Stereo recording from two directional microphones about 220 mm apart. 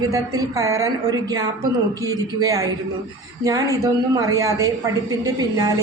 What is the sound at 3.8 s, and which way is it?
A woman's voice, 15° right (ahead or behind).